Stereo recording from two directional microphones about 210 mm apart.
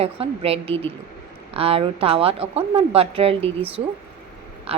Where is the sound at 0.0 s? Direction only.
30° right (ahead or behind).